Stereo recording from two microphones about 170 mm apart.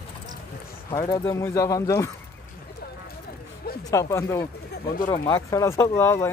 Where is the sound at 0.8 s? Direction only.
20° left (ahead or behind).